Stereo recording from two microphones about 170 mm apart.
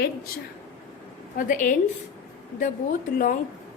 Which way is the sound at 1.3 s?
50° left (ahead or behind).